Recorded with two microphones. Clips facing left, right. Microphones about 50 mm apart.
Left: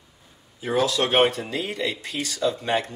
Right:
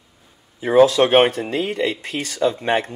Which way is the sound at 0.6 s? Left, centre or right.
Right.